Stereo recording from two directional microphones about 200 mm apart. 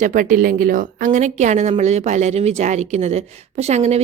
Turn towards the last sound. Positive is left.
turn(degrees=-35)  # may be behind; listen again after turning